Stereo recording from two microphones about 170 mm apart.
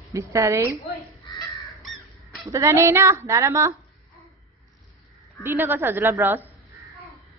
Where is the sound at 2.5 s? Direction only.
15° right (ahead or behind).